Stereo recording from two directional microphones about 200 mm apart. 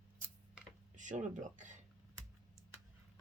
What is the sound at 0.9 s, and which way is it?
Speech, 40° right (ahead or behind).